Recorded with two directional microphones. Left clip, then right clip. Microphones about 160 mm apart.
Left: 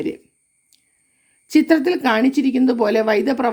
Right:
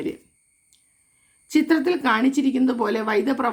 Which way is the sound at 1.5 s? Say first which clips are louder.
Left 4 dB; 40° left (ahead or behind).